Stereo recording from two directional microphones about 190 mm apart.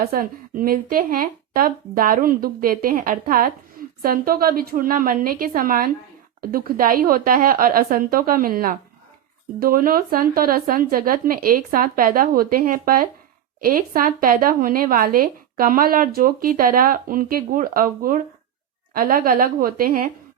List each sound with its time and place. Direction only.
0.1 s speech: 50° right (ahead or behind)